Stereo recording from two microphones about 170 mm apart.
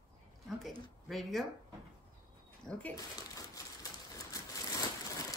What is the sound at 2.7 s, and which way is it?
Speech, 5° left (ahead or behind).